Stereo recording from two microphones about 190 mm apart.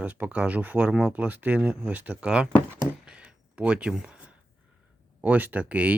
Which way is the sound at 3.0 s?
5° right (ahead or behind).